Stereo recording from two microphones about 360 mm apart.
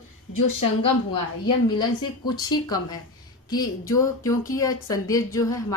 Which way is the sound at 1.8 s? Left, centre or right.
Centre.